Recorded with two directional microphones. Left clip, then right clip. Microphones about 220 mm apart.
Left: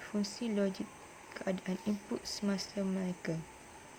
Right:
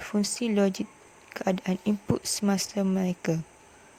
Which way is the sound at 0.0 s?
40° right (ahead or behind).